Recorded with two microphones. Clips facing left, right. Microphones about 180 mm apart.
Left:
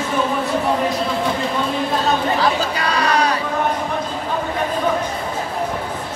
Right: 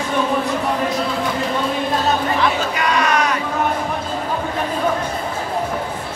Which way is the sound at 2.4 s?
35° left (ahead or behind).